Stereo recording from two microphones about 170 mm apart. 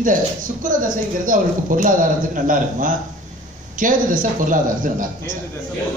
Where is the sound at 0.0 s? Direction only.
50° right (ahead or behind).